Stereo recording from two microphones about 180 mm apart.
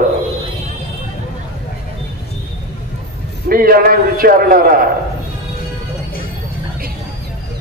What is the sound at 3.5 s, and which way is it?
A man's voice, 55° right (ahead or behind).